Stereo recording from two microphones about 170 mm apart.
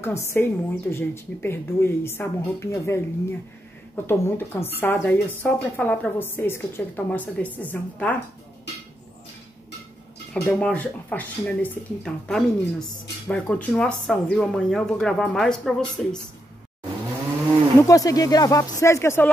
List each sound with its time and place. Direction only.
0.0 s a woman's voice: 15° left (ahead or behind)
10.3 s a woman's voice: 5° left (ahead or behind)
17.7 s speech: 20° left (ahead or behind)